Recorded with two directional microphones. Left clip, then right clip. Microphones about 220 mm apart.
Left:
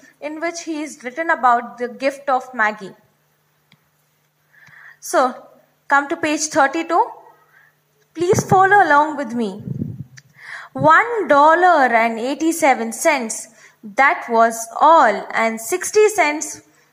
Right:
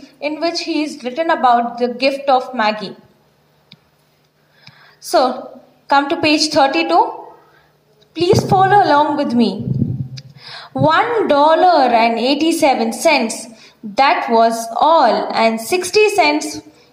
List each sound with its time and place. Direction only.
0.2 s a woman's voice: 60° left (ahead or behind)
4.7 s a sound: 60° left (ahead or behind)
5.9 s a woman's voice: 60° left (ahead or behind)
8.1 s a woman's voice: 60° left (ahead or behind)
10.4 s a sound: 60° left (ahead or behind)
10.8 s a woman's voice: 60° left (ahead or behind)